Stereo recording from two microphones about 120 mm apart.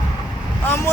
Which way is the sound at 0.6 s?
20° left (ahead or behind).